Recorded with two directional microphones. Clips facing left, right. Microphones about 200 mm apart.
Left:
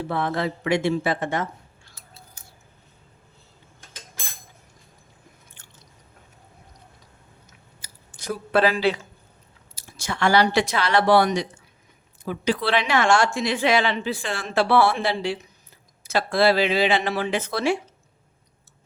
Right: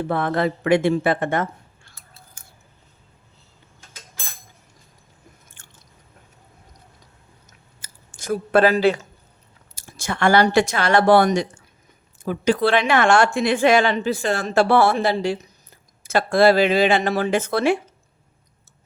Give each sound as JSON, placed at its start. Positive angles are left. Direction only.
{"t": 0.0, "sound": "speech", "side_deg": -55}
{"t": 5.6, "sound": "a sound", "side_deg": -50}
{"t": 7.8, "sound": "clicking", "side_deg": -50}
{"t": 9.7, "sound": "a woman's voice", "side_deg": -50}